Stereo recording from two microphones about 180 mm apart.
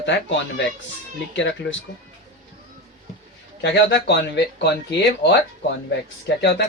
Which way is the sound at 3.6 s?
70° left (ahead or behind).